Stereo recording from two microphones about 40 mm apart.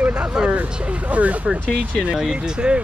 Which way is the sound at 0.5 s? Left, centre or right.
Right.